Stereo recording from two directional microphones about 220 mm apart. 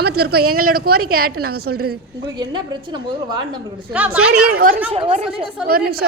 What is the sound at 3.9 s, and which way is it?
Speech, 5° right (ahead or behind).